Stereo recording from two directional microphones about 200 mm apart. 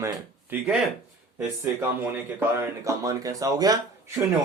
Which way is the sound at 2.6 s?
15° right (ahead or behind).